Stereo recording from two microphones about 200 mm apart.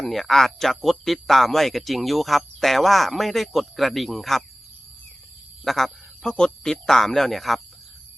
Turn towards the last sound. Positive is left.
turn(degrees=0)  # may be behind; listen again after turning